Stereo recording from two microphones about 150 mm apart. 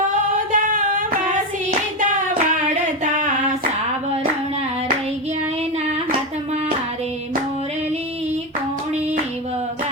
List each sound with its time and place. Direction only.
0.6 s female singing: 60° right (ahead or behind)